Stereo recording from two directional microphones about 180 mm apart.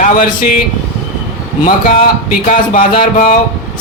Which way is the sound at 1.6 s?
50° left (ahead or behind).